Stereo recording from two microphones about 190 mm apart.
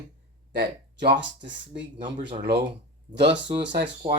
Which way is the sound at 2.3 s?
55° right (ahead or behind).